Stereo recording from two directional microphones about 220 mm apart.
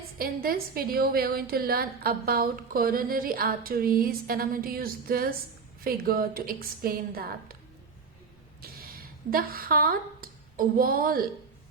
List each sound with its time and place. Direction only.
0.2 s a woman's voice: 45° right (ahead or behind)
8.6 s speech: 40° right (ahead or behind)